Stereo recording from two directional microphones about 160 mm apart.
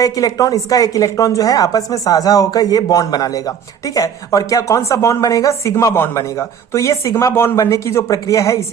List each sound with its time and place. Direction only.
0.0 s a woman's voice: 20° left (ahead or behind)